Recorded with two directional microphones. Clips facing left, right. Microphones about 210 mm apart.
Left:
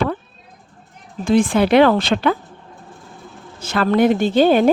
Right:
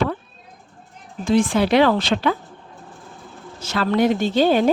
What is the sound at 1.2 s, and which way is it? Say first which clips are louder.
Speech: left 3 dB; 55° left (ahead or behind).